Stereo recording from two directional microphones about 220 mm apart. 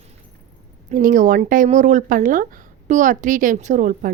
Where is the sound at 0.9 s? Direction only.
35° right (ahead or behind).